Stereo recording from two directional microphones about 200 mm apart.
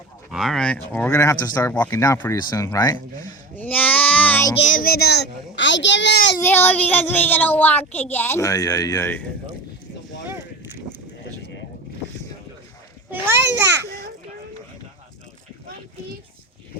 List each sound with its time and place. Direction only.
0.3 s a child's voice: centre (ahead or behind)
3.5 s child singing: 10° left (ahead or behind)
4.5 s a child's voice: 40° left (ahead or behind); by 6.1 s 65° left (ahead or behind)
6.3 s a child's voice: 10° left (ahead or behind)